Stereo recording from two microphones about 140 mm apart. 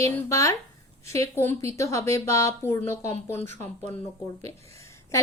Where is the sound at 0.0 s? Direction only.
20° left (ahead or behind).